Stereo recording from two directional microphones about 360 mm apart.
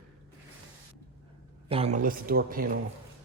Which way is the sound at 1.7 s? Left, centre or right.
Centre.